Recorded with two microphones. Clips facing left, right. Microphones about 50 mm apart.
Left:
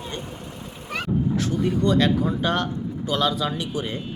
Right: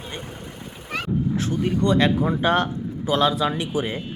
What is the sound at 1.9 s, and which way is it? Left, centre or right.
Speech, right.